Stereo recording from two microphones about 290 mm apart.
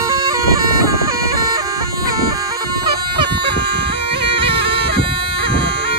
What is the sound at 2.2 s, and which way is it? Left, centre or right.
Bagpipes, centre.